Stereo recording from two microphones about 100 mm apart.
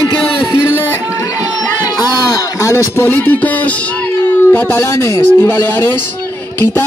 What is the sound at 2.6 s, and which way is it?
Speech, 25° left (ahead or behind).